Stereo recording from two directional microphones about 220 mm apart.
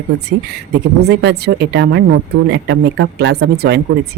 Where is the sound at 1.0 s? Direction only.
50° right (ahead or behind).